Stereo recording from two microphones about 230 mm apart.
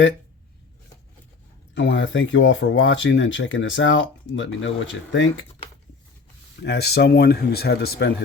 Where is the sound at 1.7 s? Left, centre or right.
Left.